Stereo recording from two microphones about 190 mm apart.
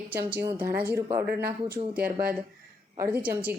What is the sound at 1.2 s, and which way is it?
Speech, 55° right (ahead or behind).